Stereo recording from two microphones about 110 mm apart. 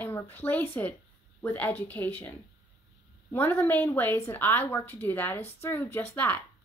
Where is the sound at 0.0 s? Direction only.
15° left (ahead or behind).